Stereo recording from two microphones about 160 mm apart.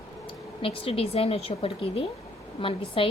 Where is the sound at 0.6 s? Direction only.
35° left (ahead or behind).